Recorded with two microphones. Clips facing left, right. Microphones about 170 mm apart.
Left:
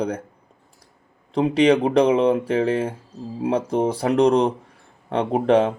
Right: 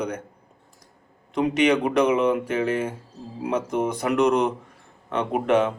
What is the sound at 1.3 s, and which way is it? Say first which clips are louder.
Speech: left 3 dB; 30° left (ahead or behind).